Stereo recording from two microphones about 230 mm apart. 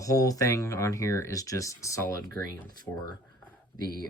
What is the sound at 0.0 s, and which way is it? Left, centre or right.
Speech, centre.